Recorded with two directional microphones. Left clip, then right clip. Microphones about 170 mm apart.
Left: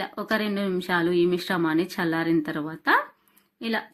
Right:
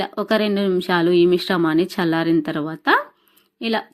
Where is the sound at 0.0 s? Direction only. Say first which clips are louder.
Right 7 dB; 35° right (ahead or behind).